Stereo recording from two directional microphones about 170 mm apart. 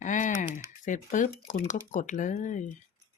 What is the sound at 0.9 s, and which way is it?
Speech, 50° left (ahead or behind).